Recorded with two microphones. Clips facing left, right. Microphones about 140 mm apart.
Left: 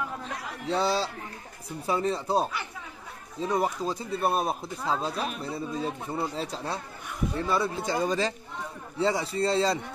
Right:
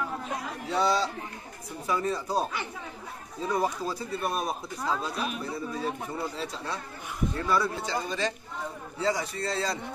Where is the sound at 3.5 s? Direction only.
25° left (ahead or behind).